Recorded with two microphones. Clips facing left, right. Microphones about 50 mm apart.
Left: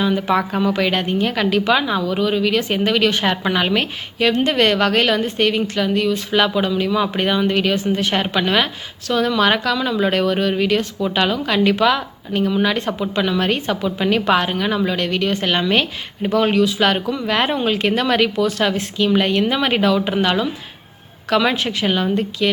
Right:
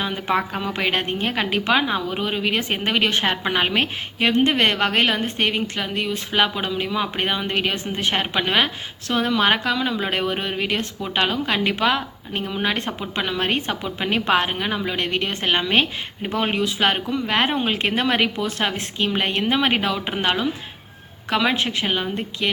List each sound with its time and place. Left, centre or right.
0.0 s speech: centre
3.8 s speech: right; by 10.1 s centre
10.1 s speech: right
21.5 s speech: right